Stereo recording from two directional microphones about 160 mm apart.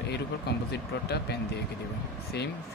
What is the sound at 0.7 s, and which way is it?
Speech, 90° left.